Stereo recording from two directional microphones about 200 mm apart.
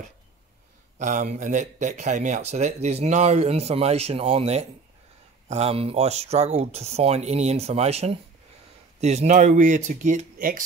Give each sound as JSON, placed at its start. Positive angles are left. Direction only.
{"t": 0.9, "sound": "speech", "side_deg": -40}